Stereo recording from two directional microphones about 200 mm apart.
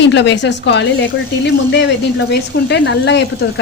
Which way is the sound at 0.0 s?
60° left (ahead or behind).